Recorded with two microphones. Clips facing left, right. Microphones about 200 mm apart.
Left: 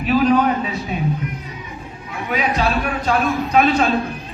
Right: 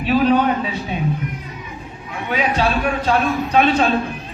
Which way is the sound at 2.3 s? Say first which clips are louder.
Right 1 dB; 30° right (ahead or behind).